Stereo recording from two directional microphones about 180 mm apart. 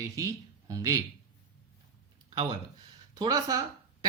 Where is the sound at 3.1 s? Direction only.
20° right (ahead or behind).